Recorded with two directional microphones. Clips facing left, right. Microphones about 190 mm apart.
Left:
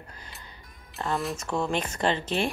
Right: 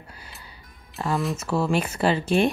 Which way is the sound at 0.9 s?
Centre (ahead or behind).